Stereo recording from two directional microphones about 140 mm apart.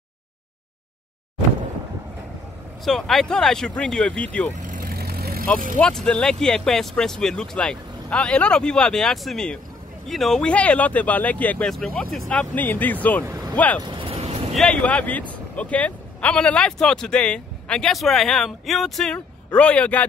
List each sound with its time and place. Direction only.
2.8 s speech: centre (ahead or behind)
4.6 s vehicle: 80° right
5.8 s speech: 5° left (ahead or behind)
13.2 s speech: 20° right (ahead or behind)
13.8 s vehicle: 40° right (ahead or behind)
14.5 s speech: 5° left (ahead or behind)